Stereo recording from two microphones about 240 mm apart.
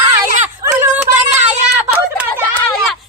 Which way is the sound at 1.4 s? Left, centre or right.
Right.